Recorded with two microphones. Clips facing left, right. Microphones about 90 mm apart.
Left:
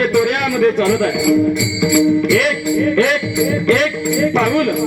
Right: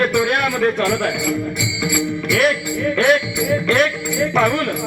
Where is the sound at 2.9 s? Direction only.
45° right (ahead or behind).